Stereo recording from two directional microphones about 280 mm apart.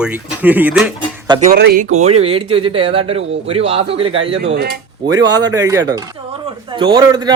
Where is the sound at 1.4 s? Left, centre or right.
Right.